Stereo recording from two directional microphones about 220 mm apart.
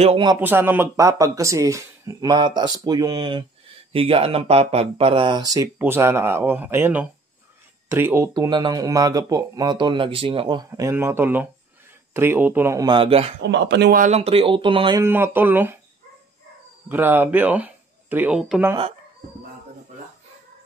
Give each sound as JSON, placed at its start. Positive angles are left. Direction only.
{"t": 0.0, "sound": "speech", "side_deg": -25}
{"t": 0.4, "sound": "speech", "side_deg": -10}
{"t": 10.7, "sound": "speech", "side_deg": -10}
{"t": 13.4, "sound": "speech", "side_deg": -50}
{"t": 15.0, "sound": "speech", "side_deg": -10}
{"t": 16.9, "sound": "speech", "side_deg": -10}